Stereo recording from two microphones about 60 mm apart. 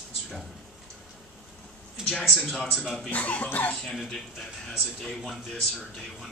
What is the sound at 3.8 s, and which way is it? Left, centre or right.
Speech, centre.